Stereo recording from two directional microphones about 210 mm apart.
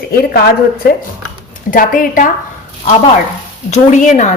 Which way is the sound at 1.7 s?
40° left (ahead or behind).